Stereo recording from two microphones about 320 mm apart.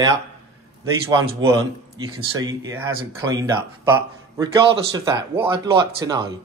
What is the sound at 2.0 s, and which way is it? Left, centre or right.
Speech, centre.